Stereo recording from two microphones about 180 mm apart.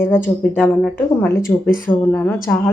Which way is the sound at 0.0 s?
10° left (ahead or behind).